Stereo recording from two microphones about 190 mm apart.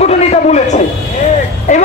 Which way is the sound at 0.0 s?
35° left (ahead or behind).